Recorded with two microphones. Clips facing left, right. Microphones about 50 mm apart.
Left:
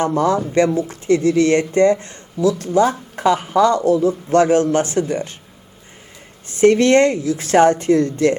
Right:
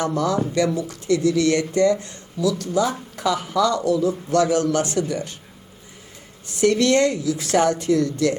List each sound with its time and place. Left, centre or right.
0.0 s speech: left
6.5 s speech: left